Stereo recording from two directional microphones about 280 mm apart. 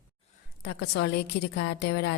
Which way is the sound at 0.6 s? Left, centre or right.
Left.